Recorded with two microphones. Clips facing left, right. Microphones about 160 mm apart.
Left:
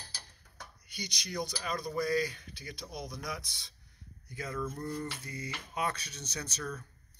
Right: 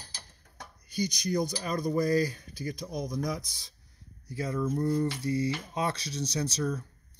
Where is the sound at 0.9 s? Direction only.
45° right (ahead or behind).